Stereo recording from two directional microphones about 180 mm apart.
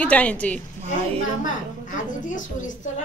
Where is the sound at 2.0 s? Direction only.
45° left (ahead or behind).